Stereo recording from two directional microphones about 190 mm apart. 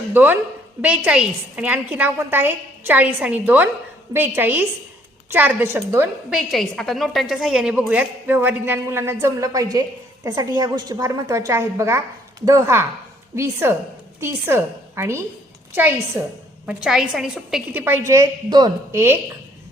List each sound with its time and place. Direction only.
0.1 s a woman's voice: 10° right (ahead or behind)
6.3 s a woman's voice: centre (ahead or behind)